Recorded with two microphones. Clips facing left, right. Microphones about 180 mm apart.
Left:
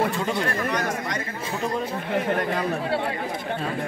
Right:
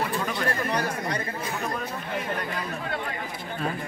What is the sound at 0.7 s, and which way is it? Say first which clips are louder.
Chatter: left 1 dB; 30° right (ahead or behind).